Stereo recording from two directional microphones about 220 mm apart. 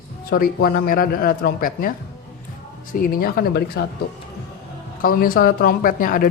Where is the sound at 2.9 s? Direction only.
40° left (ahead or behind).